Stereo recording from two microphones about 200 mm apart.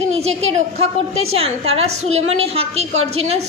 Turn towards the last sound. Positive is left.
turn(degrees=-30)  # may be behind; listen again after turning